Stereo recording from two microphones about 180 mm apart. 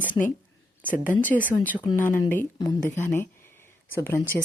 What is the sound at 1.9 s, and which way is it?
Speech, 10° left (ahead or behind).